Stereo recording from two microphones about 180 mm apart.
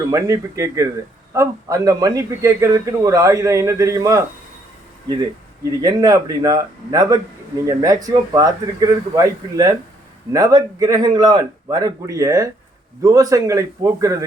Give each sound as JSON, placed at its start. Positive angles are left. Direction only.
{"t": 0.1, "sound": "a man's voice", "side_deg": -15}
{"t": 5.8, "sound": "a man's voice", "side_deg": -20}